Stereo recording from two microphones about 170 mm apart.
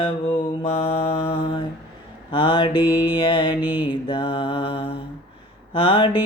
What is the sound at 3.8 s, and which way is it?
Mantra, 30° left (ahead or behind).